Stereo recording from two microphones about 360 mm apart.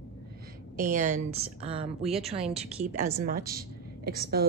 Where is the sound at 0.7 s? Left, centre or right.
Right.